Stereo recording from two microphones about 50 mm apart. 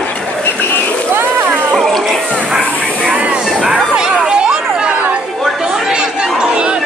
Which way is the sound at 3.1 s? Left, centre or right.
Right.